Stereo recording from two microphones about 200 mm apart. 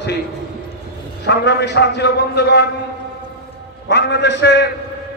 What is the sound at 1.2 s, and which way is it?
A man's voice, 60° left (ahead or behind).